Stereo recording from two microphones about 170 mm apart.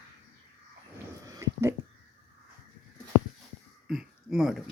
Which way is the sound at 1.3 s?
20° right (ahead or behind).